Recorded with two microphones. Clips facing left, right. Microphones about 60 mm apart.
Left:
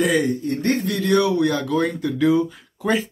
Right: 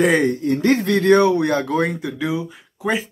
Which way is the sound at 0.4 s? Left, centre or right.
Right.